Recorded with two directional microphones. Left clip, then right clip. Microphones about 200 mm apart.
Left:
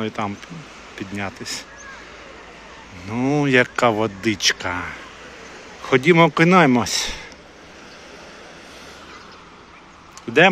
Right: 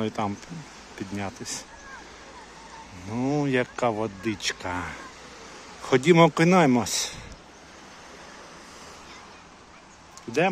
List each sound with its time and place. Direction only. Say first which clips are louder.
0.0 s speech: left 3 dB; 20° right (ahead or behind)
3.1 s speech: left 7 dB; 10° right (ahead or behind)